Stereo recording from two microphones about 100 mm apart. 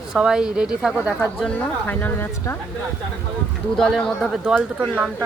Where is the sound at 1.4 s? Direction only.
10° left (ahead or behind).